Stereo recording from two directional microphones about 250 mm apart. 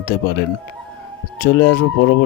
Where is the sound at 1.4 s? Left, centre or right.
Left.